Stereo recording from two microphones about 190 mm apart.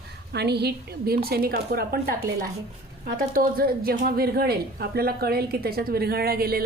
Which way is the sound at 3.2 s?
50° right (ahead or behind).